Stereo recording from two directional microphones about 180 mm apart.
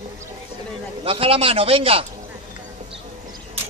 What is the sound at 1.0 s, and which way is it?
A man's voice, 30° right (ahead or behind).